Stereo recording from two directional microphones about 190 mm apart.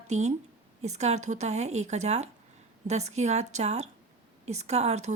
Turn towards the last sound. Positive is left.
turn(degrees=-35)  # may be behind; listen again after turning